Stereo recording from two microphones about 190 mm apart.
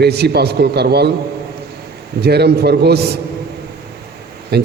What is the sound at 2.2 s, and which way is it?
Speech, 60° right (ahead or behind).